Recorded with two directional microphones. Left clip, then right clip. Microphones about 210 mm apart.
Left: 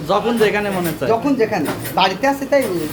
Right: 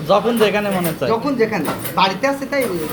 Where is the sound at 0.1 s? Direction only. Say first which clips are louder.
Right 1 dB; 10° left (ahead or behind).